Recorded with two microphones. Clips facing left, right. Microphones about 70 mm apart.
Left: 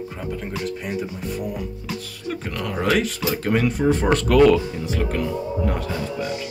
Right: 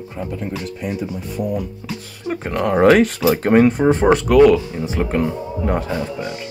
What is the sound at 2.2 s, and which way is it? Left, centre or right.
Speech, right.